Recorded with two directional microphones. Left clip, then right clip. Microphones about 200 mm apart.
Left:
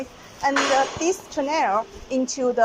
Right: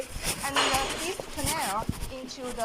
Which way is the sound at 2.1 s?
60° left (ahead or behind).